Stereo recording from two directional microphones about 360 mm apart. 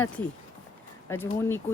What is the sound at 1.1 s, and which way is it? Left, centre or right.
Speech, centre.